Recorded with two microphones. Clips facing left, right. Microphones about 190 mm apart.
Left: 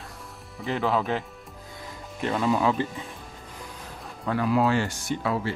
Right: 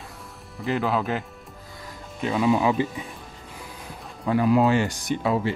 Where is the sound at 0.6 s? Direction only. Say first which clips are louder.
Right 1 dB; centre (ahead or behind).